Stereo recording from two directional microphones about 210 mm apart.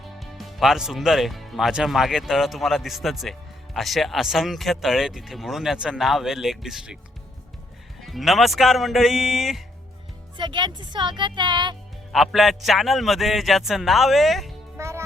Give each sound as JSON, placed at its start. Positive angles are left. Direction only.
{"t": 0.2, "sound": "speech", "side_deg": 0}
{"t": 8.0, "sound": "speech", "side_deg": 0}
{"t": 10.3, "sound": "speech", "side_deg": -20}
{"t": 12.1, "sound": "speech", "side_deg": 0}
{"t": 14.8, "sound": "music", "side_deg": -15}